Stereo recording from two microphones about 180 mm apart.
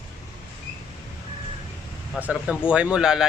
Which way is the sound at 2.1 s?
5° right (ahead or behind).